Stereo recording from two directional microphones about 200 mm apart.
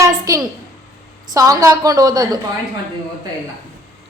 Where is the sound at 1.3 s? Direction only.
15° right (ahead or behind).